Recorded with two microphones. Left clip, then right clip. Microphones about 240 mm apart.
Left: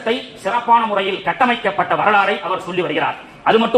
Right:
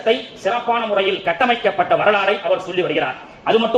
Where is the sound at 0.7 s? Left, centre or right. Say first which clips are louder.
Left 5 dB; left.